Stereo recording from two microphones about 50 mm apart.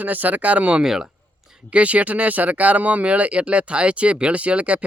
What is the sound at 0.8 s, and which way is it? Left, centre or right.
Speech, centre.